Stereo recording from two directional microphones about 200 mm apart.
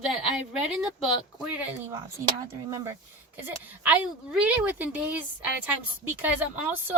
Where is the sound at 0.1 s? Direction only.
Centre (ahead or behind).